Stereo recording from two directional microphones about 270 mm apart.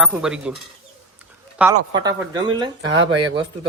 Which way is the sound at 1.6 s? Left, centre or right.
Centre.